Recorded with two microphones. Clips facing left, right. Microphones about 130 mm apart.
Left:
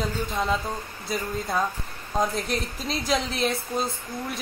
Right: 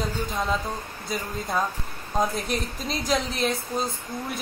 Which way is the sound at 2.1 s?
Centre (ahead or behind).